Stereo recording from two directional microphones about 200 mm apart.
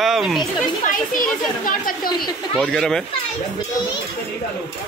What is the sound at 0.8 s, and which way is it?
A child's voice, 40° left (ahead or behind).